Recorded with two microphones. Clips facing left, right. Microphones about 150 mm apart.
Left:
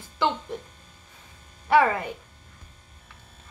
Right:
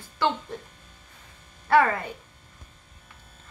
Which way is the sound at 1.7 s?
15° left (ahead or behind).